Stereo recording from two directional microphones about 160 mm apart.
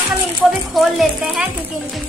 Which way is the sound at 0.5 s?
Centre (ahead or behind).